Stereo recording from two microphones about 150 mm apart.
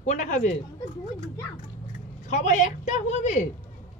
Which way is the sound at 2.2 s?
55° left (ahead or behind).